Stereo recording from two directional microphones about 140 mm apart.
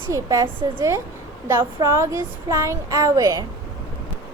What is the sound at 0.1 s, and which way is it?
Speech, 25° right (ahead or behind).